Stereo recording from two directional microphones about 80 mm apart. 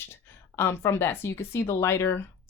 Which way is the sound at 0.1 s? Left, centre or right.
Left.